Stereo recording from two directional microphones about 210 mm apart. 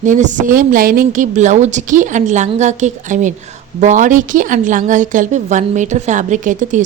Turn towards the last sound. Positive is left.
turn(degrees=-35)  # may be behind; listen again after turning